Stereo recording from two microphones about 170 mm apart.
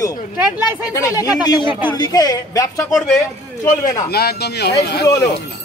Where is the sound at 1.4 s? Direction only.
25° left (ahead or behind).